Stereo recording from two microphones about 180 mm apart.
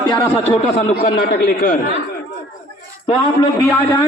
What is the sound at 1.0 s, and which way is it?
Speech, 50° left (ahead or behind).